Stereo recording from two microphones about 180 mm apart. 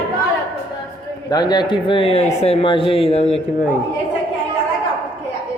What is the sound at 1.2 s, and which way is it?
Speech, 25° left (ahead or behind).